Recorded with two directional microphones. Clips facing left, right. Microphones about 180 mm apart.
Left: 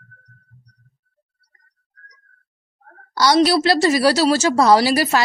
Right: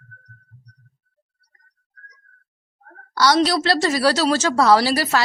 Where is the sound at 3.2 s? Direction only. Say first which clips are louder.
Left 2 dB; 10° left (ahead or behind).